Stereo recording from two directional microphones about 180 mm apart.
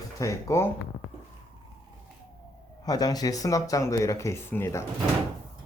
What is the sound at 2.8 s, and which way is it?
Speech, 20° left (ahead or behind).